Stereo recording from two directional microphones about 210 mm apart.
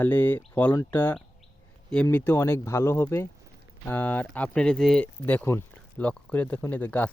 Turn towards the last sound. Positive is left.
turn(degrees=10)  # may be behind; listen again after turning